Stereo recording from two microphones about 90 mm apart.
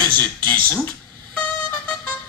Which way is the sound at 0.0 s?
20° left (ahead or behind).